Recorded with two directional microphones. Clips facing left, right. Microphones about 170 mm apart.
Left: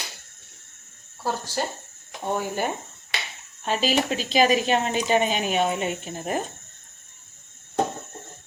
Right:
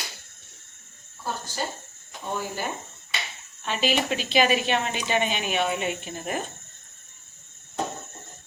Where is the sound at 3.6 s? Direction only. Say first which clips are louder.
Left 2 dB; 40° left (ahead or behind).